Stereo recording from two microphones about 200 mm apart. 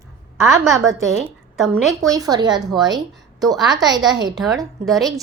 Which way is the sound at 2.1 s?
20° right (ahead or behind).